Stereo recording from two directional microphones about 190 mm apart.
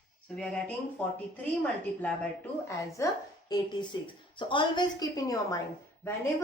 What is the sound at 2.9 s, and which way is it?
A woman's voice, 20° left (ahead or behind).